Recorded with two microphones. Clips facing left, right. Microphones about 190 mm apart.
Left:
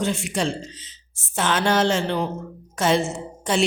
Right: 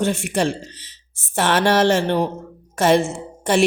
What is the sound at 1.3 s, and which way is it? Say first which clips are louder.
Speech: right 4 dB; 65° right (ahead or behind).